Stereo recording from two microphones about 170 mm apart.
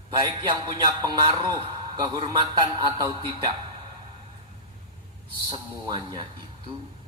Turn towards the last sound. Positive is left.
turn(degrees=-25)  # may be behind; listen again after turning